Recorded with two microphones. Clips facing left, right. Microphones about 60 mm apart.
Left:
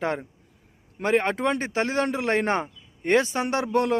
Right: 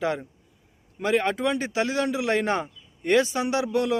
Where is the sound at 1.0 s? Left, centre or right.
Left.